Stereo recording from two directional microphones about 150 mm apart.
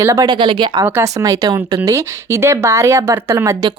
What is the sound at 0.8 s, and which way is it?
A woman's voice, 15° right (ahead or behind).